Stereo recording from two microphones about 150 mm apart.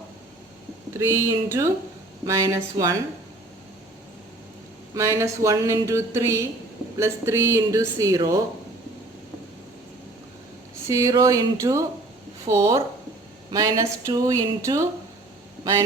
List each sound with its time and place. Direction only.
0.9 s speech: 20° right (ahead or behind)
4.9 s speech: 20° right (ahead or behind)
10.8 s speech: 20° right (ahead or behind)